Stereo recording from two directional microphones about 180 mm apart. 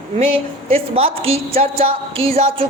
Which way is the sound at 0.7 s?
30° right (ahead or behind).